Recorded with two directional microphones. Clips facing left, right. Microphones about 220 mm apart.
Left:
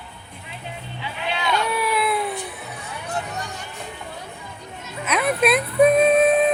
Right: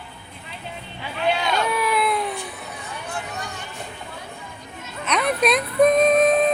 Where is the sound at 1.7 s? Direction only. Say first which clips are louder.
Right 1 dB; centre (ahead or behind).